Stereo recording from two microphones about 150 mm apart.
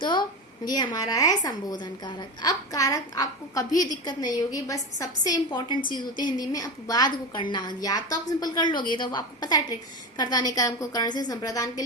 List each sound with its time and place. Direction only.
0.0 s a woman's voice: 30° left (ahead or behind)